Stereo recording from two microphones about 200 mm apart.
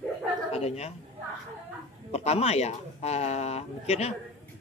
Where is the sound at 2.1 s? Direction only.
30° left (ahead or behind).